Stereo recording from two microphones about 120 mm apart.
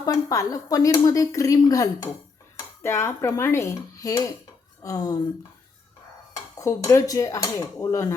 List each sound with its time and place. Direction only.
0.0 s speech: 30° left (ahead or behind)
6.3 s speech: 30° left (ahead or behind)